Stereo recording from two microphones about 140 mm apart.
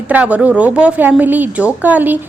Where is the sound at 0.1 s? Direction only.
10° right (ahead or behind).